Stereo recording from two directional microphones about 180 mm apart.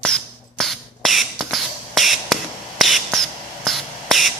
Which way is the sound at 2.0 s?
Centre (ahead or behind).